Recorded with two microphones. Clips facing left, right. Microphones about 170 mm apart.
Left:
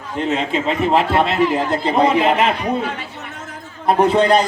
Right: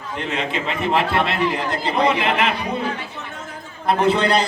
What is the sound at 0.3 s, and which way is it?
A man's voice, 45° left (ahead or behind).